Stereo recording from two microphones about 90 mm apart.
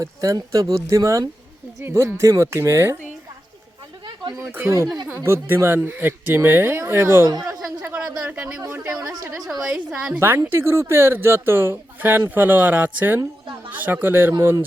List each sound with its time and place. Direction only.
0.0 s speech: 40° right (ahead or behind)
4.0 s a sound: 55° right (ahead or behind)
4.5 s speech: 25° right (ahead or behind)
7.9 s a sound: 15° right (ahead or behind)
8.6 s speech: 25° right (ahead or behind)
9.5 s a woman's voice: 5° right (ahead or behind)
10.2 s speech: 30° right (ahead or behind)